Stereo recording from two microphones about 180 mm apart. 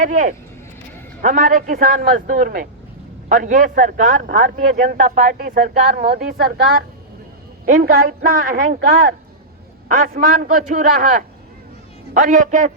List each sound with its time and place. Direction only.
0.0 s a man's voice: 45° right (ahead or behind)